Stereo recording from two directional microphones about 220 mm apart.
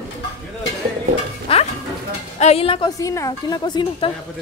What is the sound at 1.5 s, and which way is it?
Music, 25° left (ahead or behind).